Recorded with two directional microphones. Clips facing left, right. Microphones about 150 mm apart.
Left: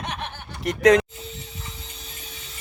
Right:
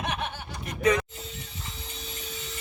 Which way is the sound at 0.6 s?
90° left.